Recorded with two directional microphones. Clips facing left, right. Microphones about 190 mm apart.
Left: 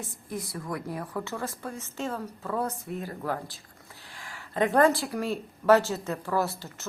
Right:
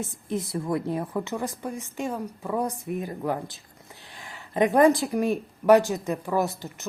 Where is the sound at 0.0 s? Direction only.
25° right (ahead or behind).